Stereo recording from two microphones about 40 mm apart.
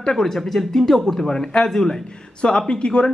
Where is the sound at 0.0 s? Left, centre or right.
Centre.